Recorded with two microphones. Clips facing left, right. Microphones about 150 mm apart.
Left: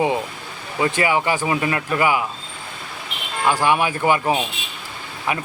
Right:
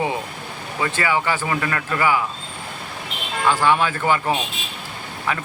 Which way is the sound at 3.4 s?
15° left (ahead or behind).